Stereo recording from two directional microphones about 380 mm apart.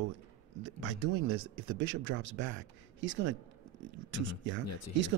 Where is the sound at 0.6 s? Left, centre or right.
Right.